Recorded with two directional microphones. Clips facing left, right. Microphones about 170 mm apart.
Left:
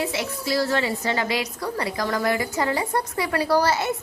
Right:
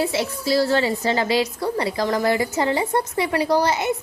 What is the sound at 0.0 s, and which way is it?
A woman's voice, 30° right (ahead or behind).